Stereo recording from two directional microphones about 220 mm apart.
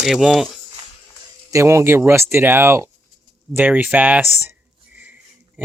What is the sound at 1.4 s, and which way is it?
Speech, 15° right (ahead or behind).